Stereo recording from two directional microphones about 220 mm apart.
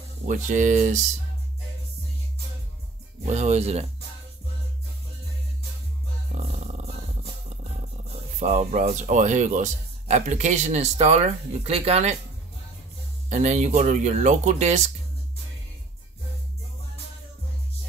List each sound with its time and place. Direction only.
0.3 s speech: 35° right (ahead or behind)
3.3 s speech: 30° right (ahead or behind)
8.4 s speech: 30° right (ahead or behind)
13.3 s speech: 30° right (ahead or behind)